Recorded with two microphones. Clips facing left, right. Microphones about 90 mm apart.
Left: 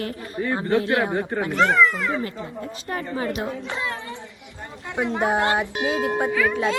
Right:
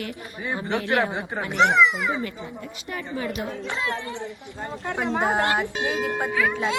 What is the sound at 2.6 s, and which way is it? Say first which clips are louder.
Speech: left 7 dB; 40° left (ahead or behind).